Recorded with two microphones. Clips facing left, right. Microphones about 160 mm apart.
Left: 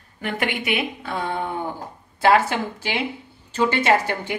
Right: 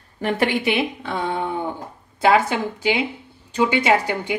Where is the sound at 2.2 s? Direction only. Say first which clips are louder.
Right 1 dB; 15° right (ahead or behind).